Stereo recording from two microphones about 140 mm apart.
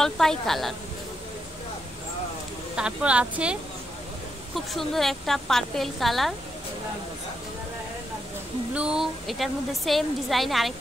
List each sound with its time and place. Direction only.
0.0 s a woman's voice: 5° left (ahead or behind)
2.7 s speech: 5° right (ahead or behind)
4.6 s a woman's voice: centre (ahead or behind)
8.7 s a woman's voice: 5° right (ahead or behind)